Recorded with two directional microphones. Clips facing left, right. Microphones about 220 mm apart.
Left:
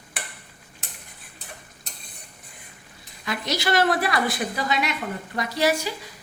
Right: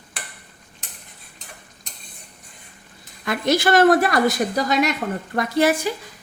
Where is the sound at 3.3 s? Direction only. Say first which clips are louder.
Right 7 dB; 50° right (ahead or behind).